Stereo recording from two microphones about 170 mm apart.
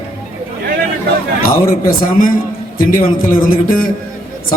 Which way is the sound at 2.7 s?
55° left (ahead or behind).